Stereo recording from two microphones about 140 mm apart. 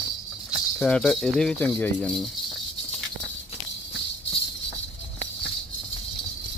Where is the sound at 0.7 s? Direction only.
5° left (ahead or behind).